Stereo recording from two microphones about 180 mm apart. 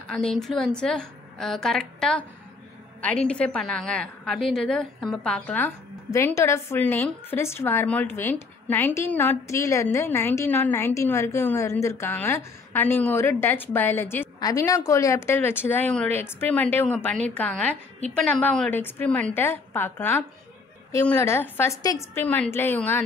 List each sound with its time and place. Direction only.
0.2 s a woman's voice: 5° left (ahead or behind)